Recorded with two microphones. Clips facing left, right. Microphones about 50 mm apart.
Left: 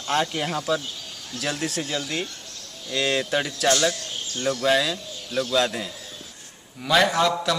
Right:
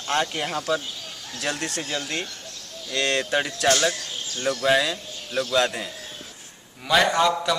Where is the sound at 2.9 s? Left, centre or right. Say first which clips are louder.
Even; centre.